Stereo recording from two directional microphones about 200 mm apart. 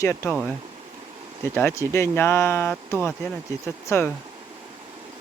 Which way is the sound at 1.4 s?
10° left (ahead or behind).